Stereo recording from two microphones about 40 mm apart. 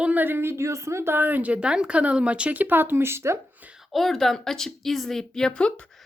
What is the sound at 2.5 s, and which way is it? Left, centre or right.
Speech, right.